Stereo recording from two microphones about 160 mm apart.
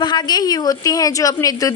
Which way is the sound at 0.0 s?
25° left (ahead or behind).